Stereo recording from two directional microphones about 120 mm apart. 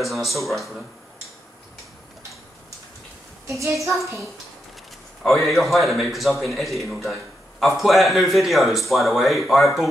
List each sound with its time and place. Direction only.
0.0 s speech: centre (ahead or behind)
3.4 s a woman's voice: 25° right (ahead or behind)
5.2 s speech: centre (ahead or behind)